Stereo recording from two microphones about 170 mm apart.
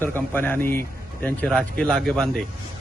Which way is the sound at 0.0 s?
10° left (ahead or behind).